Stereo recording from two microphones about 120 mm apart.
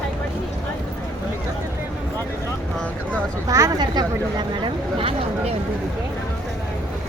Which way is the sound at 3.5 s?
25° right (ahead or behind).